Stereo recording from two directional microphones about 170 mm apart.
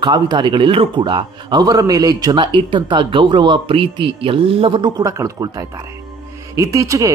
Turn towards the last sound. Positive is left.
turn(degrees=-20)  # may be behind; listen again after turning